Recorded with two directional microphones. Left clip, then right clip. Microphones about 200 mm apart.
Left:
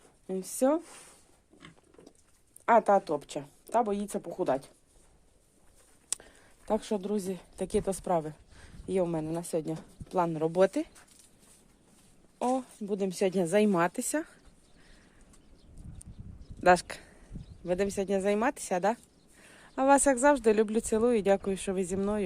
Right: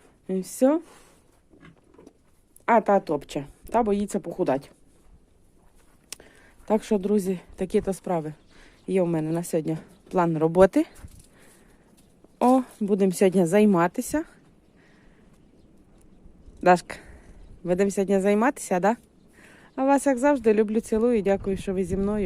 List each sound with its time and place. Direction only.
0.3 s speech: 15° right (ahead or behind)
2.6 s speech: 10° right (ahead or behind)
6.1 s a sound: centre (ahead or behind)
6.7 s speech: 15° right (ahead or behind)
12.4 s a woman's voice: 35° right (ahead or behind); by 14.3 s 10° right (ahead or behind)
16.6 s a sound: 10° right (ahead or behind)
17.7 s speech: 20° right (ahead or behind)
19.4 s speech: 5° right (ahead or behind)